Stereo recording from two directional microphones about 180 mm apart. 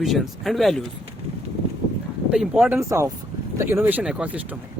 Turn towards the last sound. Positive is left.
turn(degrees=-10)  # may be behind; listen again after turning